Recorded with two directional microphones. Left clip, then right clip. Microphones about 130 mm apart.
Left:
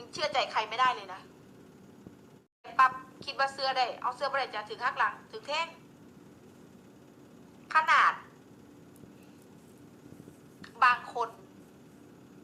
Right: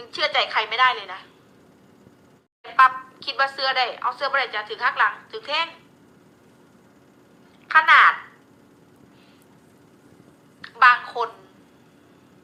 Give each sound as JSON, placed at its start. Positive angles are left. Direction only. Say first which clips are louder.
{"t": 0.0, "sound": "a woman's voice", "louder": "right 8 dB", "side_deg": -15}
{"t": 2.6, "sound": "a woman's voice", "louder": "right 9 dB", "side_deg": -20}
{"t": 7.7, "sound": "a woman's voice", "louder": "right 10 dB", "side_deg": -15}
{"t": 10.6, "sound": "a woman's voice", "louder": "right 10 dB", "side_deg": -15}